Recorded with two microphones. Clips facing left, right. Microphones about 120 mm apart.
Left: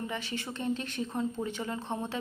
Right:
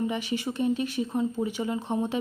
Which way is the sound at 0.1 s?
15° right (ahead or behind).